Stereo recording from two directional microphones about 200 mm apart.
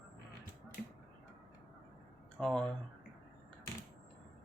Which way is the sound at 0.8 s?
45° left (ahead or behind).